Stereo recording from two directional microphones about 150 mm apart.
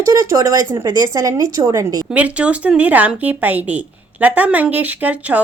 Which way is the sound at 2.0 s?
10° right (ahead or behind).